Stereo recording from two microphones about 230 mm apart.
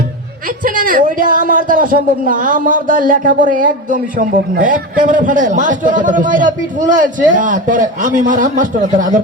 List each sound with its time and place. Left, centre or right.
0.6 s a man's voice: right